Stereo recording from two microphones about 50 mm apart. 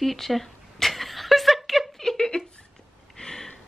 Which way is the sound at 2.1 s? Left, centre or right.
Centre.